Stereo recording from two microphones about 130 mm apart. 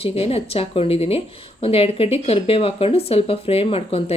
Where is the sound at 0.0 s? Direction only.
50° left (ahead or behind).